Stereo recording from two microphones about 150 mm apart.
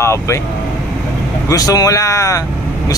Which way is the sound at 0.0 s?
20° left (ahead or behind).